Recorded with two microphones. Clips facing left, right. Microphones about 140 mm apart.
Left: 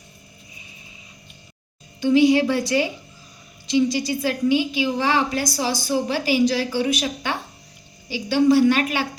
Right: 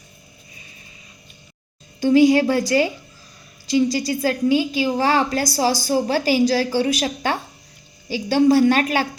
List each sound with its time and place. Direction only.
2.0 s a woman's voice: 40° right (ahead or behind)